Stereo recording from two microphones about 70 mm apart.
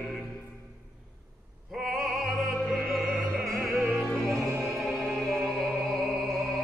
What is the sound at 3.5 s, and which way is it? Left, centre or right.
Opera, right.